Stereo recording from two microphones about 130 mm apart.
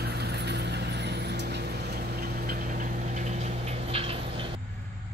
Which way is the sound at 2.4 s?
90° right.